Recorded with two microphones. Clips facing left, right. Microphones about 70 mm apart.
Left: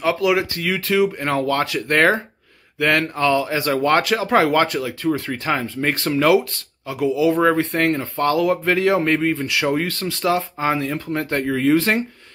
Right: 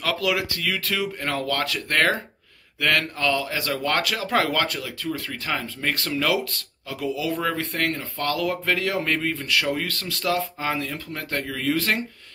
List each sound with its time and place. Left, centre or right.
0.0 s speech: left